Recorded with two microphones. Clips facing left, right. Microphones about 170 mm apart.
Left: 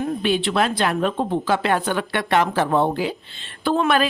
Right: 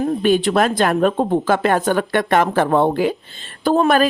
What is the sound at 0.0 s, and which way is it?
Speech, 45° right (ahead or behind).